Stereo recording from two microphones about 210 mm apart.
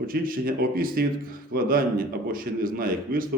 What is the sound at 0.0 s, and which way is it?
A man's voice, 45° right (ahead or behind).